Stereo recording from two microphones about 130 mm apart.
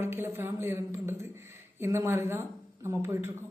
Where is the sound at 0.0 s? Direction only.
20° right (ahead or behind).